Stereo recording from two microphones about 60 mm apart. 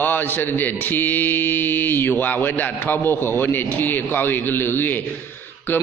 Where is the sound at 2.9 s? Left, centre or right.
Left.